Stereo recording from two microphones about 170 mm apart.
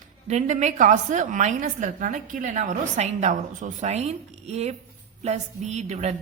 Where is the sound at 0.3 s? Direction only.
45° right (ahead or behind).